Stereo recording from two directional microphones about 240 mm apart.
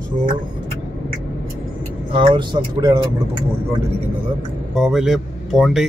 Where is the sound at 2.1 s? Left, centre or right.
Right.